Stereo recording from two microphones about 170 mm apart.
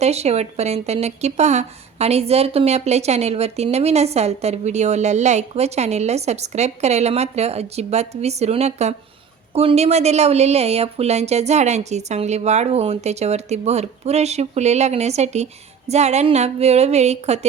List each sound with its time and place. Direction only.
0.0 s speech: 40° right (ahead or behind)